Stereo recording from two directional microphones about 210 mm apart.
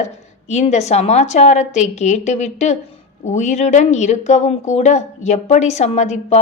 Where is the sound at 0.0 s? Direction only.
30° left (ahead or behind).